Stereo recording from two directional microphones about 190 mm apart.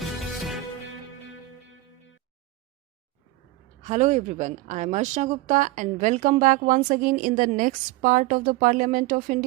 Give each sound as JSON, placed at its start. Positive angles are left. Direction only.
{"t": 3.8, "sound": "a woman's voice", "side_deg": -40}